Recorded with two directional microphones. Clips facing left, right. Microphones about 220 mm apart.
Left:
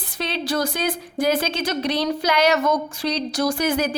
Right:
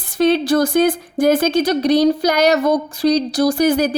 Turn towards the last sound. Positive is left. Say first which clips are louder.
# right 6 dB
turn(degrees=-40)  # may be behind; listen again after turning